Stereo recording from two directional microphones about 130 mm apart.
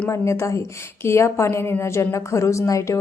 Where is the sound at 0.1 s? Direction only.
20° left (ahead or behind).